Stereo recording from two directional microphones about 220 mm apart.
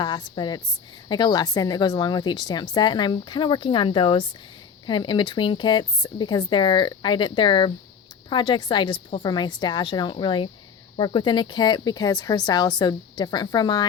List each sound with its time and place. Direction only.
0.0 s a woman's voice: 20° left (ahead or behind)